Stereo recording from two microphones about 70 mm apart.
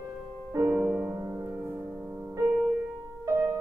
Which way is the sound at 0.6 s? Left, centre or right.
Centre.